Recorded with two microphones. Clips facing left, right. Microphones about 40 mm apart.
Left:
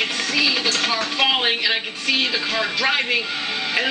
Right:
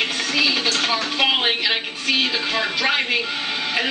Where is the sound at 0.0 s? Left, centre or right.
Centre.